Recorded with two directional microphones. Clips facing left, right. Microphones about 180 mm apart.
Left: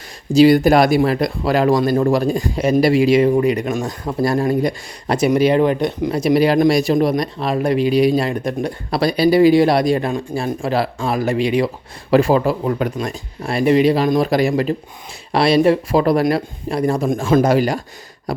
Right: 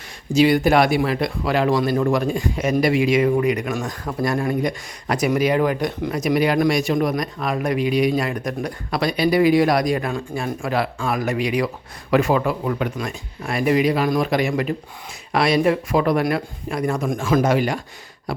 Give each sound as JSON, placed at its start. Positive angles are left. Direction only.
{"t": 0.3, "sound": "speech", "side_deg": 35}
{"t": 4.2, "sound": "speech", "side_deg": 35}